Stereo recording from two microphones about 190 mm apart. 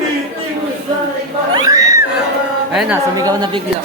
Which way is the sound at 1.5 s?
20° right (ahead or behind).